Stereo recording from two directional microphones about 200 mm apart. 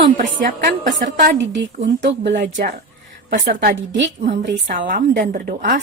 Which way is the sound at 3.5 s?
60° right (ahead or behind).